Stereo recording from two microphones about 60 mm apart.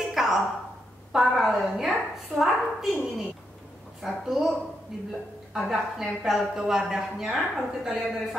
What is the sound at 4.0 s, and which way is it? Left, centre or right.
A woman's voice, centre.